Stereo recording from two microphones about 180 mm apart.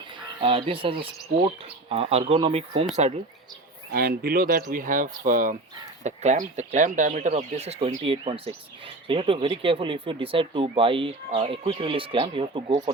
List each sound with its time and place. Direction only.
0.4 s speech: 30° right (ahead or behind)
3.9 s speech: 55° right (ahead or behind); by 12.7 s 30° right (ahead or behind)